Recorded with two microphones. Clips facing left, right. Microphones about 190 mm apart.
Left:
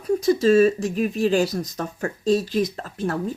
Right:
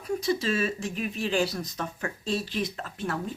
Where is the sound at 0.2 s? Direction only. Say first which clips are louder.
Left 13 dB; 45° left (ahead or behind).